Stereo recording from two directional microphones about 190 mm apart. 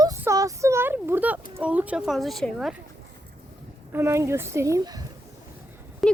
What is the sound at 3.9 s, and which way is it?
Speech, 15° right (ahead or behind).